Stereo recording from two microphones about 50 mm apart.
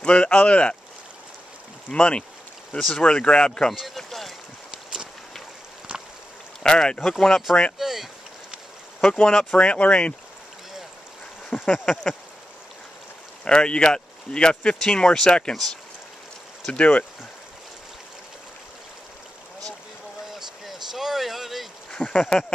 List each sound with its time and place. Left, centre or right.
0.0 s speech: left
1.9 s speech: left
2.7 s speech: left
3.1 s speech: centre
3.9 s boat: centre
6.6 s speech: centre
7.8 s boat: centre
9.1 s speech: centre
11.7 s a sound: centre
13.5 s speech: centre
15.5 s a sound: centre
16.7 s speech: left
20.2 s a sound: centre
21.9 s speech: centre